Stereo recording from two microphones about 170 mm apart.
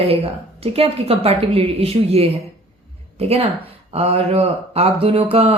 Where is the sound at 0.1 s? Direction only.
35° right (ahead or behind).